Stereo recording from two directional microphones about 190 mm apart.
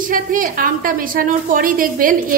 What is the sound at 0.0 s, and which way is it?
A woman's voice, 45° right (ahead or behind).